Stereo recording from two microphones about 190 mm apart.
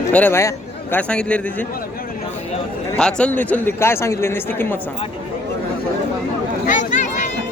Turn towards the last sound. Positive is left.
turn(degrees=40)  # may be behind; listen again after turning